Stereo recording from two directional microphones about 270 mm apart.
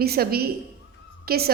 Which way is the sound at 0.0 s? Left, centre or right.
Right.